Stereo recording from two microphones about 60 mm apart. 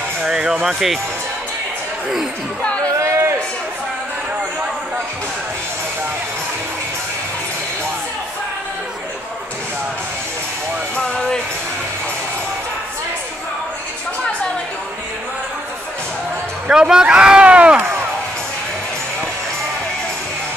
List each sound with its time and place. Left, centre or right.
0.2 s speech: centre
3.0 s a sound: right
11.0 s music: centre
16.6 s speech: centre